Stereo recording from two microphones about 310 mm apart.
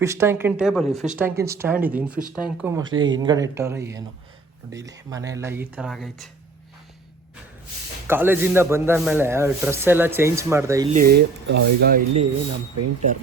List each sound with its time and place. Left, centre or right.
0.0 s speech: centre
8.0 s speech: centre
10.9 s speech: right